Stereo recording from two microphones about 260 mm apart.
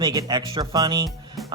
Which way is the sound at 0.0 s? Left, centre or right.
Centre.